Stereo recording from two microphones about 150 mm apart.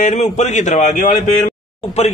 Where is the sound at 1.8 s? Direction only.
45° left (ahead or behind).